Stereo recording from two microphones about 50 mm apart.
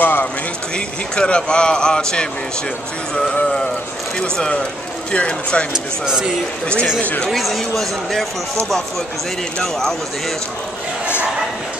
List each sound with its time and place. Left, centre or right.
0.0 s speech: left
0.7 s speech: left
4.2 s speech: left
5.7 s speech: centre
7.0 s speech: left
7.2 s speech: centre
9.6 s speech: centre